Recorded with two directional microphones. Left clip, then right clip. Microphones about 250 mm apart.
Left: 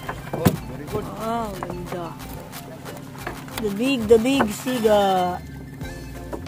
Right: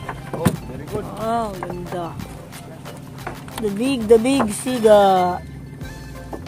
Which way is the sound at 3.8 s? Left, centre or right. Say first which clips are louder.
Right 2 dB; centre.